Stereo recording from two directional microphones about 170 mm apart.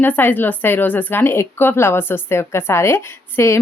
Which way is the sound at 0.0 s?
10° left (ahead or behind).